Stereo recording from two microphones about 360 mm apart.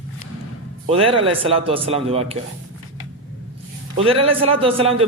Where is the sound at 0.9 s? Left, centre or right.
Centre.